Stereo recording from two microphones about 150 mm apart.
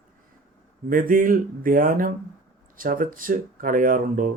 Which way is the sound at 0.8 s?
70° right (ahead or behind).